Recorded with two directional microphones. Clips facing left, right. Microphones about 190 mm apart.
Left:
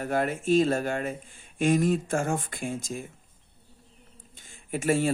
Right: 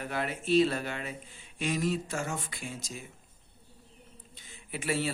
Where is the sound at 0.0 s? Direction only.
45° left (ahead or behind).